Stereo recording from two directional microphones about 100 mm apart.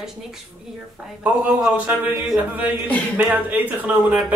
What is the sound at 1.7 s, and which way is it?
A woman's voice, 15° right (ahead or behind).